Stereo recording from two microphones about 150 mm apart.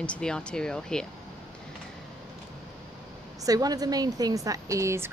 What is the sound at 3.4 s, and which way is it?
A woman's voice, 25° right (ahead or behind).